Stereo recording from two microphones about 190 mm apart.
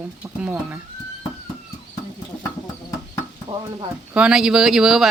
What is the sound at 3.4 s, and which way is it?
Speech, 25° right (ahead or behind).